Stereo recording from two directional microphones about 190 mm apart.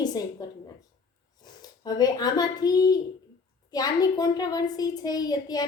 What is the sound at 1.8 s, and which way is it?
A woman's voice, 20° left (ahead or behind).